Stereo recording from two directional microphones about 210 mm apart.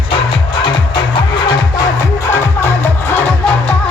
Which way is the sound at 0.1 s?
20° left (ahead or behind).